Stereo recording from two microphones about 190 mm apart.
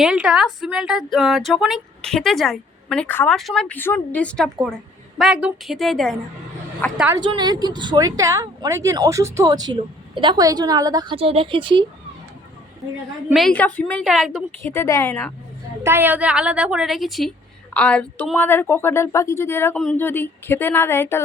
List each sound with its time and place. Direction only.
0.0 s a woman's voice: 5° right (ahead or behind)
7.2 s speech: 25° right (ahead or behind)
13.3 s speech: 5° left (ahead or behind)
14.6 s a woman's voice: 15° left (ahead or behind)
15.8 s a woman's voice: 10° right (ahead or behind); by 21.2 s 10° left (ahead or behind)